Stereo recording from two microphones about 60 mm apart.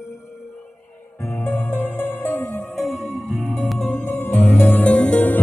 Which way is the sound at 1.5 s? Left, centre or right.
Left.